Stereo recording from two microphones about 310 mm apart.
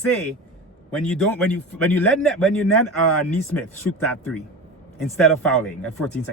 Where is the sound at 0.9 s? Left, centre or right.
Centre.